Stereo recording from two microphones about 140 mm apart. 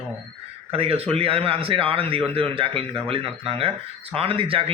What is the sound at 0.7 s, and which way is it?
Speech, 45° right (ahead or behind).